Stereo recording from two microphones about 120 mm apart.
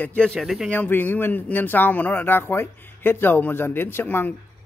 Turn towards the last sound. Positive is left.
turn(degrees=15)  # may be behind; listen again after turning